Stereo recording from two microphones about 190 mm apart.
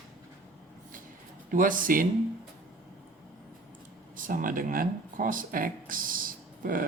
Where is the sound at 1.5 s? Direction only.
45° right (ahead or behind).